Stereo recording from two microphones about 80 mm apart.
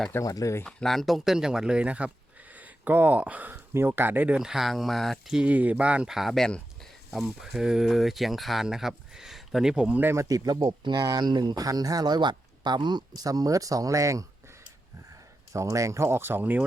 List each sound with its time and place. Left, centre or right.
0.2 s speech: left
0.6 s speech: centre; by 4.4 s right
4.4 s speech: centre
5.3 s speech: centre
6.1 s speech: centre
10.0 s speech: right
10.2 s speech: right
11.6 s speech: right
15.5 s speech: right